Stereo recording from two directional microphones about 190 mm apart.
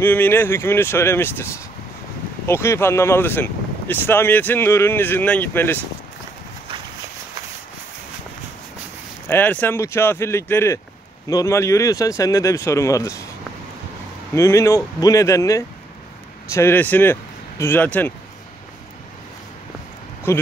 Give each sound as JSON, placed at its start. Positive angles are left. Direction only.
{"t": 0.0, "sound": "speech", "side_deg": 10}
{"t": 9.3, "sound": "speech", "side_deg": 10}
{"t": 14.3, "sound": "speech", "side_deg": 15}
{"t": 20.3, "sound": "speech", "side_deg": 15}